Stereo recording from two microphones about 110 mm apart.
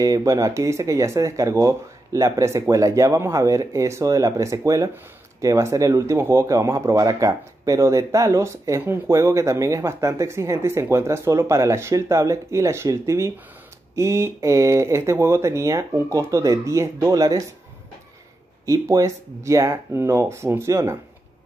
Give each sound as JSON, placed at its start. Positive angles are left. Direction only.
{"t": 0.0, "sound": "speech", "side_deg": -30}
{"t": 18.7, "sound": "speech", "side_deg": -30}